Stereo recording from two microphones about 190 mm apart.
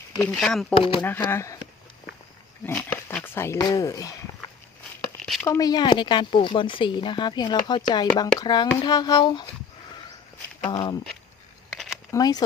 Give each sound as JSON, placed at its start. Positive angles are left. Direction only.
{"t": 0.3, "sound": "speech", "side_deg": 5}
{"t": 0.8, "sound": "speech", "side_deg": 30}
{"t": 1.3, "sound": "speech", "side_deg": 15}
{"t": 2.6, "sound": "speech", "side_deg": 10}
{"t": 5.2, "sound": "a sound", "side_deg": 5}
{"t": 5.5, "sound": "speech", "side_deg": 20}
{"t": 10.7, "sound": "speech", "side_deg": 20}
{"t": 11.7, "sound": "a sound", "side_deg": 0}
{"t": 12.1, "sound": "speech", "side_deg": 20}